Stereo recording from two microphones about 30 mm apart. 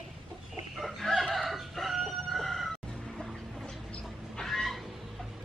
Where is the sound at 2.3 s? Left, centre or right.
Centre.